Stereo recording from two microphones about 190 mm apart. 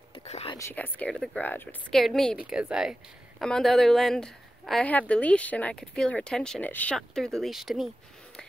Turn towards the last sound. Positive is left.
turn(degrees=0)  # may be behind; listen again after turning